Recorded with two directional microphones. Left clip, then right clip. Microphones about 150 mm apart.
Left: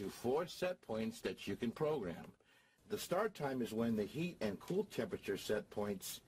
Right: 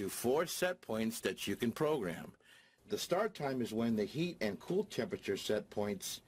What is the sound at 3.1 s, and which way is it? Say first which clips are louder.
Speech: right 3 dB; 35° right (ahead or behind).